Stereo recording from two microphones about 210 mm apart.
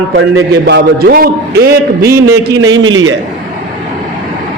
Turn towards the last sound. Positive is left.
turn(degrees=-65)  # may be behind; listen again after turning